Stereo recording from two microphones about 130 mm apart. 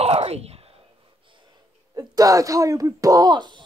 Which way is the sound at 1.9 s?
30° right (ahead or behind).